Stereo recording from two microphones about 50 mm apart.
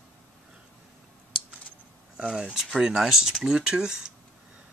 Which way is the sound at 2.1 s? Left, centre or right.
Centre.